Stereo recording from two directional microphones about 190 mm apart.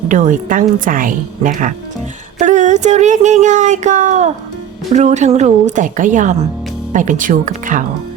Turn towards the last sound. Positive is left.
turn(degrees=-45)  # may be behind; listen again after turning